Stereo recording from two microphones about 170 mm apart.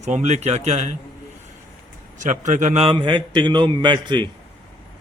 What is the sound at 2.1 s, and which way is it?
Speech, 45° right (ahead or behind).